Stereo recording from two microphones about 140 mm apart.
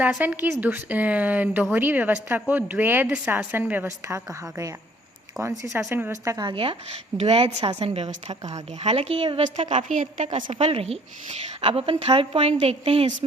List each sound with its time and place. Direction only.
0.2 s a woman's voice: 15° right (ahead or behind)
6.4 s speech: 40° right (ahead or behind)
7.2 s a woman's voice: 50° right (ahead or behind)